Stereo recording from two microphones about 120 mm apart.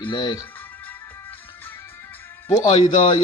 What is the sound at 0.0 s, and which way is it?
Speech, 40° left (ahead or behind).